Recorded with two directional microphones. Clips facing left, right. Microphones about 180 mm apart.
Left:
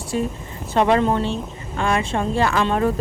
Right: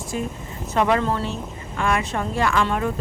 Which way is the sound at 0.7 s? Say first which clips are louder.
Left 3 dB; 25° left (ahead or behind).